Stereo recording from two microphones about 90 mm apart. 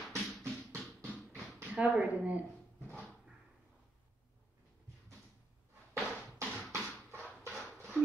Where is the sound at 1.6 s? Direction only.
15° right (ahead or behind).